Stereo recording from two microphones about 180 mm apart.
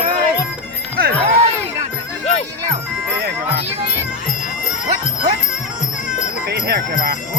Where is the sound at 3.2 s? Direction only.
65° right (ahead or behind).